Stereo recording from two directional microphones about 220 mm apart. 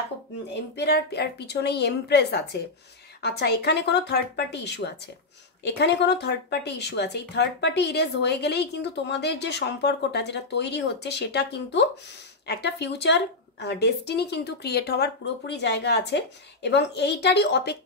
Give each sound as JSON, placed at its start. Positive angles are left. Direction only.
{"t": 0.6, "sound": "speech", "side_deg": 50}